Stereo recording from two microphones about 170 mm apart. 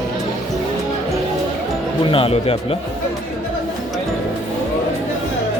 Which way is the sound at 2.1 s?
35° left (ahead or behind).